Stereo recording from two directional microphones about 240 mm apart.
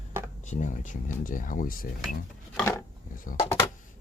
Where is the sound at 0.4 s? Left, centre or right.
Left.